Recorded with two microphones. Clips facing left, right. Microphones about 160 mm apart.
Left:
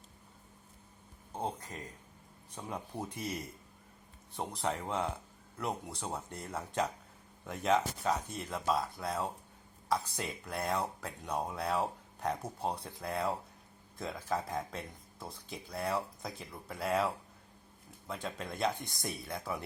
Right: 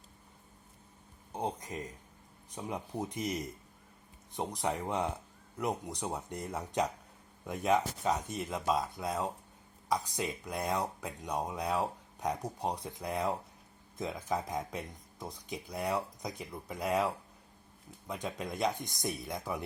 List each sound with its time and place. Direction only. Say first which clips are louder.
1.3 s speech: right 2 dB; 15° right (ahead or behind)
18.3 s speech: right 1 dB; 15° right (ahead or behind)